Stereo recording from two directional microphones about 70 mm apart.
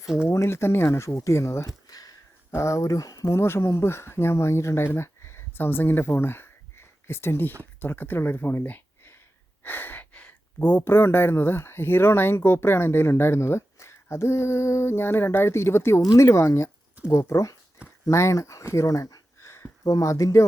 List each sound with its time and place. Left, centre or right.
0.3 s speech: left
1.9 s a sound: left
2.6 s speech: left
3.3 s speech: left
9.6 s a sound: left
10.9 s speech: left
19.8 s speech: left